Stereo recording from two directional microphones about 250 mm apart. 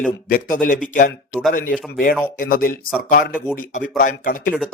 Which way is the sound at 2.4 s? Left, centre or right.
Left.